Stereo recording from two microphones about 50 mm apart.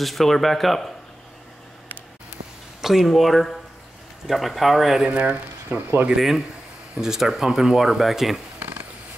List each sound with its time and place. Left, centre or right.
0.0 s speech: centre
2.8 s speech: centre
5.0 s speech: right
6.1 s speech: centre
8.5 s a sound: right